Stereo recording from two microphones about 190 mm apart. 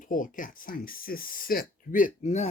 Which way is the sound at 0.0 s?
45° left (ahead or behind).